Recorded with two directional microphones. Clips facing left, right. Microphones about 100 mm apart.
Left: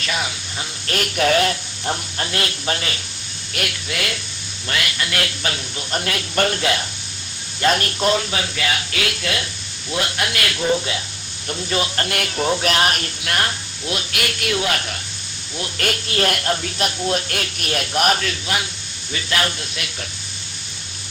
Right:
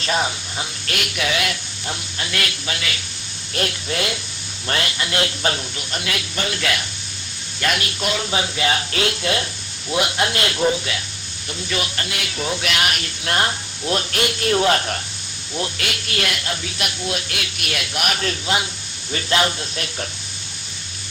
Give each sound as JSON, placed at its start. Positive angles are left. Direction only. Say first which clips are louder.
{"t": 0.0, "sound": "a man's voice", "louder": "right 4 dB", "side_deg": -35}
{"t": 0.9, "sound": "speech", "louder": "left 7 dB", "side_deg": 40}
{"t": 3.5, "sound": "speech", "louder": "right 3 dB", "side_deg": -30}
{"t": 5.9, "sound": "speech", "louder": "left 4 dB", "side_deg": 40}
{"t": 6.6, "sound": "speech", "louder": "left 3 dB", "side_deg": 30}
{"t": 7.8, "sound": "speech", "louder": "left 5 dB", "side_deg": 40}
{"t": 8.2, "sound": "speech", "louder": "right 2 dB", "side_deg": -25}
{"t": 11.9, "sound": "speech", "louder": "left 4 dB", "side_deg": 50}
{"t": 13.2, "sound": "speech", "louder": "right 3 dB", "side_deg": -25}
{"t": 13.9, "sound": "a man's voice", "louder": "right 4 dB", "side_deg": -35}
{"t": 16.0, "sound": "speech", "louder": "left 4 dB", "side_deg": 35}
{"t": 16.3, "sound": "speech", "louder": "left 5 dB", "side_deg": 45}
{"t": 18.2, "sound": "speech", "louder": "right 2 dB", "side_deg": -30}
{"t": 19.7, "sound": "a man's voice", "louder": "right 3 dB", "side_deg": -35}